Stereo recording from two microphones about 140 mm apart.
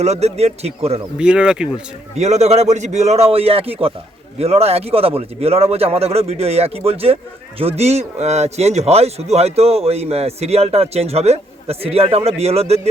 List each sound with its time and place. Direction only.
0.0 s a man's voice: 50° right (ahead or behind)
1.2 s speech: 5° right (ahead or behind)
2.1 s a man's voice: 50° right (ahead or behind)